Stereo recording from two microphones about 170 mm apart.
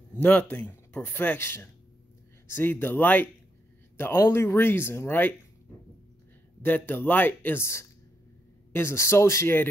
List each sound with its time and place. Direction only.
0.2 s speech: 10° left (ahead or behind)
6.6 s speech: 10° left (ahead or behind)